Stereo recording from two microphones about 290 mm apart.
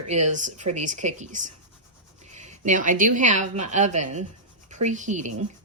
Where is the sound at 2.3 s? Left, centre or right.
Right.